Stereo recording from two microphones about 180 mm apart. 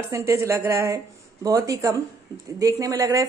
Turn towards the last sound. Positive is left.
turn(degrees=-20)  # may be behind; listen again after turning